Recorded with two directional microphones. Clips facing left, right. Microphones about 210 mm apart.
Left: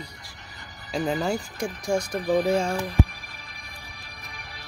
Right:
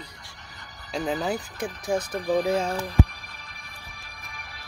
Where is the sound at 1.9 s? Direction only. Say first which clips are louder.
Left 1 dB; 10° left (ahead or behind).